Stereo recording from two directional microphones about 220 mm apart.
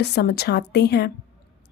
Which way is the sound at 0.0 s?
50° left (ahead or behind).